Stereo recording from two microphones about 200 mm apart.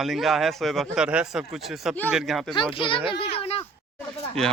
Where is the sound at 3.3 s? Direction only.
30° left (ahead or behind).